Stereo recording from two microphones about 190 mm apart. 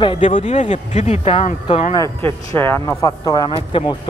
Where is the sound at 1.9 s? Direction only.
15° left (ahead or behind).